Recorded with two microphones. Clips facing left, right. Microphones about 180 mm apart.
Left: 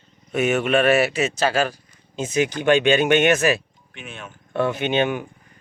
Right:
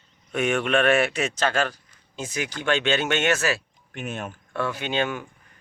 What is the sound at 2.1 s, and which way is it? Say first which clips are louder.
Speech: left 9 dB; 20° left (ahead or behind).